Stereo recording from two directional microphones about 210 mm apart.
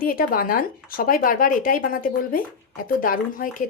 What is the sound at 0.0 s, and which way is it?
Speech, 45° left (ahead or behind).